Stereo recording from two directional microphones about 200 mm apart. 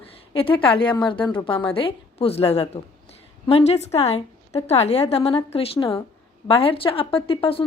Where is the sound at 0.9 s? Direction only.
25° left (ahead or behind).